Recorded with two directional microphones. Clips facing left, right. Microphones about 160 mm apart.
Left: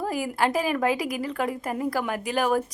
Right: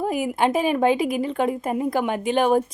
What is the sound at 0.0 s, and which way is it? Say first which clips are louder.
A woman's voice: right 4 dB; 20° right (ahead or behind).